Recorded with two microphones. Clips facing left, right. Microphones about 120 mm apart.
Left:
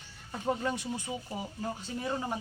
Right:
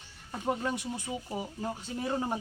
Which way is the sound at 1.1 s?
5° left (ahead or behind).